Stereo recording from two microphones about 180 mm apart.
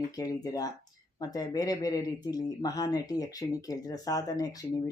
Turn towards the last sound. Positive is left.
turn(degrees=20)  # may be behind; listen again after turning